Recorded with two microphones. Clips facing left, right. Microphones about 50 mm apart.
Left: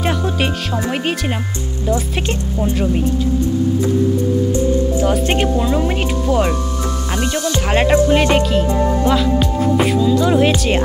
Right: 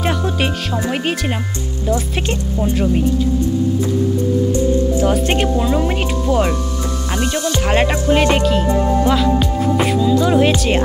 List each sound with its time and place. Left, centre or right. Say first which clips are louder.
2.8 s speech: right 3 dB; centre
4.5 s speech: even; left
5.0 s speech: even; centre
8.1 s speech: even; centre